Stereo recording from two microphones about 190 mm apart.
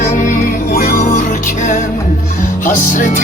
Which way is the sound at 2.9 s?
45° left (ahead or behind).